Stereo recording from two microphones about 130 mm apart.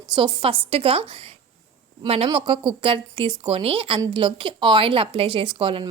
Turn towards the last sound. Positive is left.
turn(degrees=-40)  # may be behind; listen again after turning